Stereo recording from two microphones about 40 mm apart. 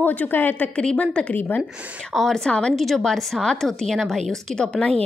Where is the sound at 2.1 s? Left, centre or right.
Centre.